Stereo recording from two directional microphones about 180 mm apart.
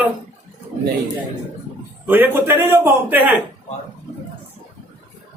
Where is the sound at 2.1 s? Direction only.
10° right (ahead or behind).